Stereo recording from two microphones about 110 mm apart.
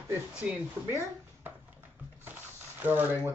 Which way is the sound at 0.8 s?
25° right (ahead or behind).